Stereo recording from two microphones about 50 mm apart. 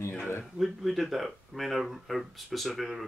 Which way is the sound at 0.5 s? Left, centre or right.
Centre.